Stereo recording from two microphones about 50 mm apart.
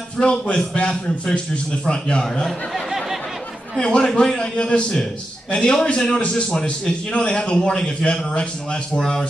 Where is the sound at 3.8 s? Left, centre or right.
Centre.